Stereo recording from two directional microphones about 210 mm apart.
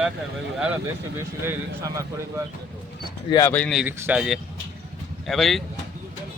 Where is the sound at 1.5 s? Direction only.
15° right (ahead or behind).